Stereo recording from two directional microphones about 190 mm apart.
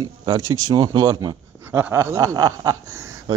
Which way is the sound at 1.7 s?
10° right (ahead or behind).